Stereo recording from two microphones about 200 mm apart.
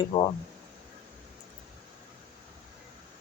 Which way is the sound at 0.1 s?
20° left (ahead or behind).